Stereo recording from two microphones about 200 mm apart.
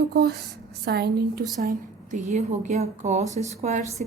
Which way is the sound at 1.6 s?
40° right (ahead or behind).